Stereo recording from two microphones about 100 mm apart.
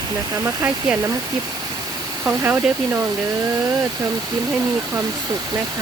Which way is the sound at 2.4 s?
20° right (ahead or behind).